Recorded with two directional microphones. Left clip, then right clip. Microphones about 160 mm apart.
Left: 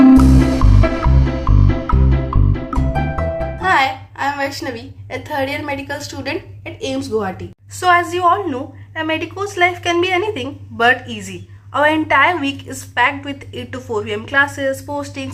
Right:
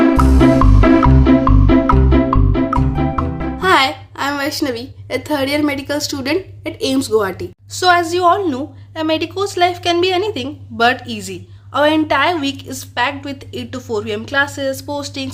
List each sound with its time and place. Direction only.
0.2 s music: centre (ahead or behind)
3.6 s a woman's voice: 40° right (ahead or behind)